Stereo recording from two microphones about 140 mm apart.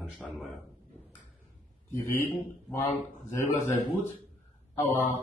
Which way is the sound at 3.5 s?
15° left (ahead or behind).